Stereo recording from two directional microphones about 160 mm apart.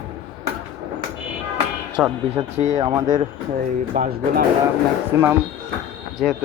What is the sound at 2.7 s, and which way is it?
Speech, 25° right (ahead or behind).